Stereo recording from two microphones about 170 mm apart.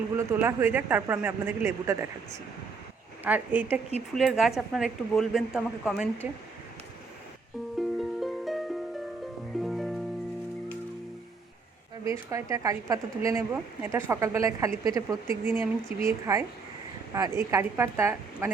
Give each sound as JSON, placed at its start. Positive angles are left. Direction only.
{"t": 0.2, "sound": "speech", "side_deg": -15}
{"t": 3.2, "sound": "speech", "side_deg": -10}
{"t": 7.8, "sound": "music", "side_deg": 0}
{"t": 12.0, "sound": "speech", "side_deg": -20}